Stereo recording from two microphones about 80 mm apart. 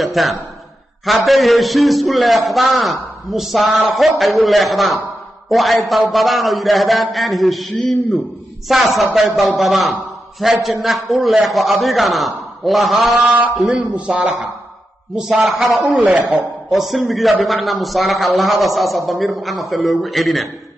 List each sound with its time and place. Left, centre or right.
0.0 s a sound: centre
1.0 s a man's voice: centre
13.7 s a man's voice: centre
15.8 s speech: centre
16.7 s a man's voice: centre